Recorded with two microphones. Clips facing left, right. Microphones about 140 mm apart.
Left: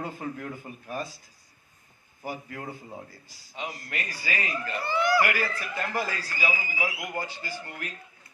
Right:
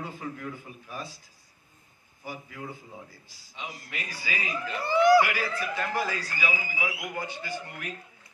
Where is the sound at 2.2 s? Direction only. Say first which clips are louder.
Left 3 dB; 55° left (ahead or behind).